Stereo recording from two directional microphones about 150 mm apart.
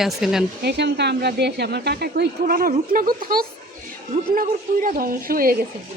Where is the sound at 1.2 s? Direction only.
90° right; by 5.5 s 75° right (ahead or behind).